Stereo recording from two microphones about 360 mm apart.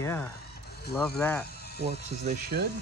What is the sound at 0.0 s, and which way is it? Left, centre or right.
Speech, centre.